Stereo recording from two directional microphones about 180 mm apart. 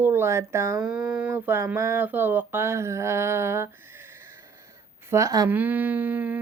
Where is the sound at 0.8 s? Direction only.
5° right (ahead or behind).